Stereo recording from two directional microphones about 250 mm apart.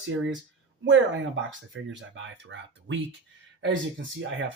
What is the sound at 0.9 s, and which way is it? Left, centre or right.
Speech, right.